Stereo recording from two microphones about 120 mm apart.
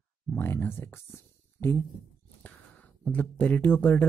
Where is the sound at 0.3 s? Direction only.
20° left (ahead or behind).